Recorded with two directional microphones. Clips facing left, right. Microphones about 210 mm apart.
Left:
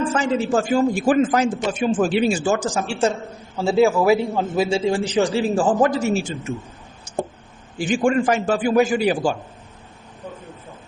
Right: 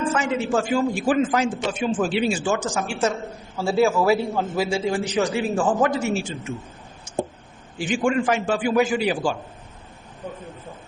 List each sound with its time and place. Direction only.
0.1 s a man's voice: 35° left (ahead or behind)
3.6 s a man's voice: 15° left (ahead or behind); by 6.2 s 35° left (ahead or behind)
7.8 s a man's voice: 40° left (ahead or behind)